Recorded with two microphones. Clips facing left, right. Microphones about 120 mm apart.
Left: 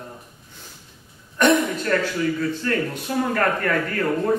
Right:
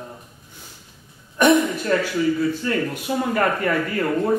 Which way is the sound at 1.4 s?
5° right (ahead or behind).